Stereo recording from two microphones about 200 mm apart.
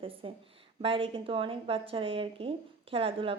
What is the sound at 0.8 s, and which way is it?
A woman's voice, 25° right (ahead or behind).